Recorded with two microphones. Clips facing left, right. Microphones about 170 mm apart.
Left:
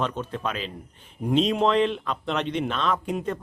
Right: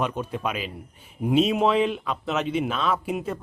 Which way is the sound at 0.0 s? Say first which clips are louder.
Right 1 dB; 10° right (ahead or behind).